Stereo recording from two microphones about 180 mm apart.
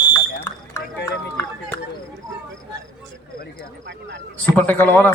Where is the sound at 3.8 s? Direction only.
90° right.